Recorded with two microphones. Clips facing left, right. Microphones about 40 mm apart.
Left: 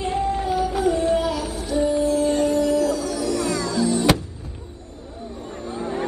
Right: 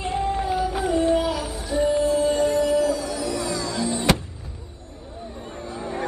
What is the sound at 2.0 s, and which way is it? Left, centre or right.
Music, right.